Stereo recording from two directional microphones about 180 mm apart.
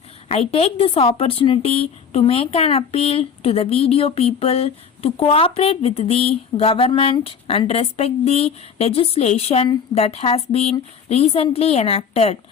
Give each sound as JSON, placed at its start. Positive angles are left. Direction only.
{"t": 0.3, "sound": "a woman's voice", "side_deg": 35}